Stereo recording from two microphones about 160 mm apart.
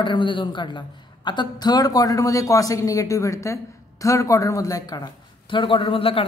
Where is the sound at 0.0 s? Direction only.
30° left (ahead or behind).